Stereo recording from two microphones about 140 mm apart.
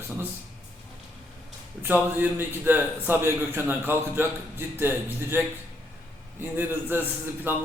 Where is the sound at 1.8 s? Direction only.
15° right (ahead or behind).